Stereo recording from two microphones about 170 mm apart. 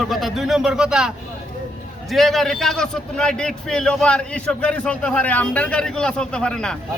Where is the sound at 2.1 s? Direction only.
Centre (ahead or behind).